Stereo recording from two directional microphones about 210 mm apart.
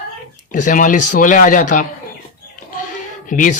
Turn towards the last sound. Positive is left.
turn(degrees=40)  # may be behind; listen again after turning